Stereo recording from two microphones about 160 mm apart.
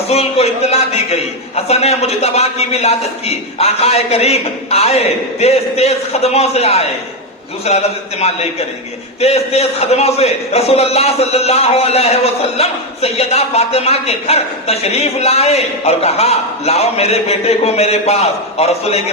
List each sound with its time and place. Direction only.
0.1 s a man's voice: 40° left (ahead or behind)